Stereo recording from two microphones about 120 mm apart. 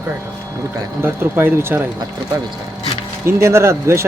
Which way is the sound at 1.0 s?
20° right (ahead or behind).